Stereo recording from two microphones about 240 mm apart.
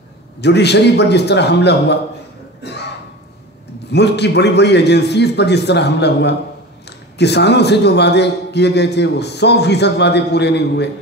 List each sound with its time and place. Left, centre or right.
0.4 s a man's voice: left
2.6 s a sound: left
3.9 s a man's voice: left